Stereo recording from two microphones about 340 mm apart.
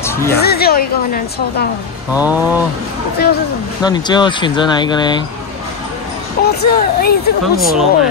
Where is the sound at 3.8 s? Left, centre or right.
Centre.